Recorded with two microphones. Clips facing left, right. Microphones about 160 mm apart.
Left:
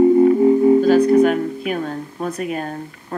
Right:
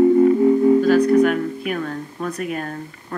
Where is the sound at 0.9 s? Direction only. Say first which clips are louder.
Left 2 dB; 25° left (ahead or behind).